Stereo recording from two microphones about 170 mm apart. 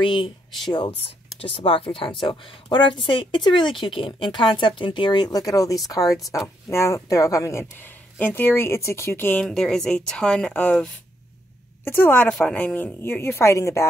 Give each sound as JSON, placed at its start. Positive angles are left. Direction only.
{"t": 0.0, "sound": "a woman's voice", "side_deg": 30}
{"t": 7.7, "sound": "a sound", "side_deg": 10}
{"t": 8.4, "sound": "speech", "side_deg": 15}